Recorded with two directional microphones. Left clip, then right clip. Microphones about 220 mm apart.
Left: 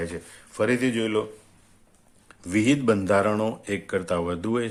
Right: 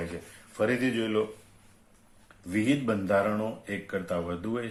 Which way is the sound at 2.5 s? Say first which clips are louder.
Left 6 dB; 45° left (ahead or behind).